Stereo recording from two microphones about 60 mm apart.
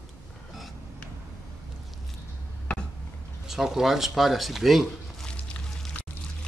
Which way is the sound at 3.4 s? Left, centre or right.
Centre.